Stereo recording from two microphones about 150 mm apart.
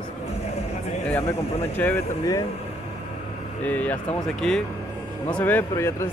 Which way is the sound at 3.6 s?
10° left (ahead or behind).